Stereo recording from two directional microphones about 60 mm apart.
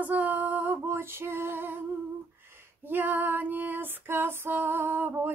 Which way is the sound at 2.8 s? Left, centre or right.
Right.